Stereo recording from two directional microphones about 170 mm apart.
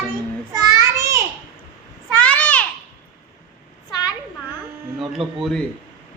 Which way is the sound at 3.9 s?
25° left (ahead or behind).